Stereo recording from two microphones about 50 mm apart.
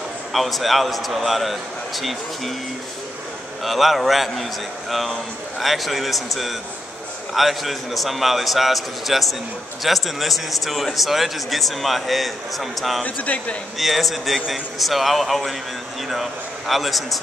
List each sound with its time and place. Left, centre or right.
0.3 s a man's voice: centre
3.6 s a man's voice: centre
7.3 s a man's voice: centre
13.0 s speech: left
13.7 s a man's voice: centre